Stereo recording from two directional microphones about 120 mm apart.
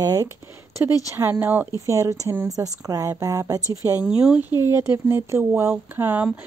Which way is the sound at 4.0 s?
5° right (ahead or behind).